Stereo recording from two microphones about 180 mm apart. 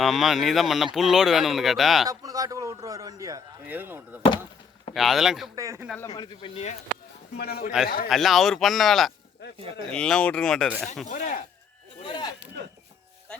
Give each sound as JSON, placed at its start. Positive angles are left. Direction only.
{"t": 0.0, "sound": "speech", "side_deg": 0}
{"t": 2.0, "sound": "a man's voice", "side_deg": -20}
{"t": 5.5, "sound": "a man's voice", "side_deg": -15}
{"t": 6.0, "sound": "speech", "side_deg": 20}
{"t": 7.3, "sound": "a man's voice", "side_deg": 60}
{"t": 8.1, "sound": "speech", "side_deg": 0}
{"t": 11.0, "sound": "speech", "side_deg": 45}
{"t": 12.0, "sound": "speech", "side_deg": 25}